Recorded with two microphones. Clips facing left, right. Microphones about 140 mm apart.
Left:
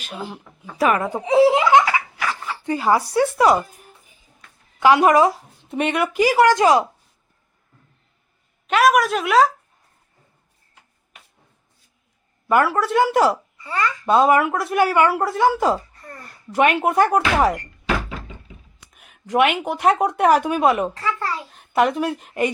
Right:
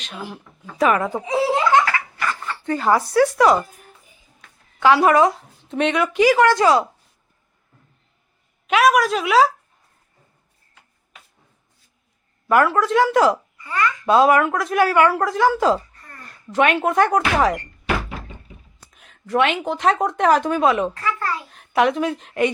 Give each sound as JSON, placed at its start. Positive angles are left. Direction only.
{"t": 0.2, "sound": "speech", "side_deg": 20}
{"t": 1.5, "sound": "laughter", "side_deg": 15}
{"t": 2.1, "sound": "dog", "side_deg": 5}
{"t": 2.6, "sound": "a woman's voice", "side_deg": 10}
{"t": 4.8, "sound": "a woman's voice", "side_deg": 15}
{"t": 8.6, "sound": "a woman's voice", "side_deg": 0}
{"t": 12.5, "sound": "a woman's voice", "side_deg": 0}
{"t": 13.7, "sound": "a child's voice", "side_deg": 30}
{"t": 14.1, "sound": "a woman's voice", "side_deg": 0}
{"t": 18.9, "sound": "a woman's voice", "side_deg": 10}
{"t": 21.0, "sound": "speech", "side_deg": 30}
{"t": 21.5, "sound": "a woman's voice", "side_deg": 0}